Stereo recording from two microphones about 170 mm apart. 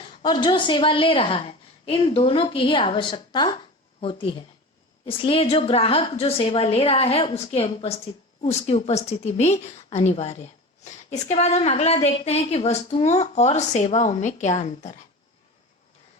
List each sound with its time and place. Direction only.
0.0 s a woman's voice: 25° left (ahead or behind); by 14.9 s 45° left (ahead or behind)